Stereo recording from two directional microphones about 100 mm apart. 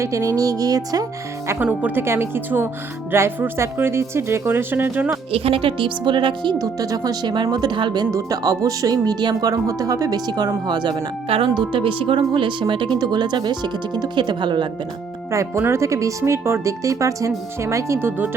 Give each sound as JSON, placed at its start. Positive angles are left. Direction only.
{"t": 0.0, "sound": "speech", "side_deg": -30}
{"t": 1.5, "sound": "speech", "side_deg": -15}
{"t": 5.3, "sound": "speech", "side_deg": -70}
{"t": 8.1, "sound": "speech", "side_deg": -35}
{"t": 11.3, "sound": "speech", "side_deg": -60}
{"t": 15.3, "sound": "speech", "side_deg": -25}